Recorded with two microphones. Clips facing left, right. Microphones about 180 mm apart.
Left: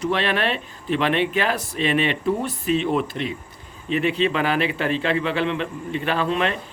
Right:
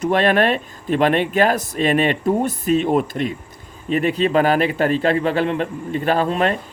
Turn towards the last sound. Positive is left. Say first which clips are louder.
# right 4 dB
turn(degrees=-45)  # may be behind; listen again after turning